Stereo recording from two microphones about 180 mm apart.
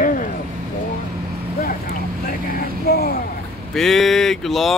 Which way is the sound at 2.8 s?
60° left (ahead or behind).